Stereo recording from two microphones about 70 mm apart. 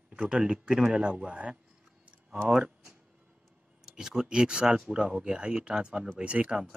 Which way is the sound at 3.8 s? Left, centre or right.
Centre.